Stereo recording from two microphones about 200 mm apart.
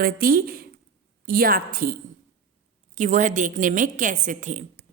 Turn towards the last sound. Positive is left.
turn(degrees=-40)  # may be behind; listen again after turning